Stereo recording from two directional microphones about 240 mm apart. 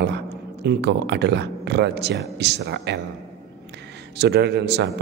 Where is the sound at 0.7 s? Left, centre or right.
Right.